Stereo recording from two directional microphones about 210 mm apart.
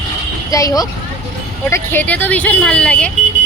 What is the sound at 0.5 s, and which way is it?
A woman's voice, 15° left (ahead or behind).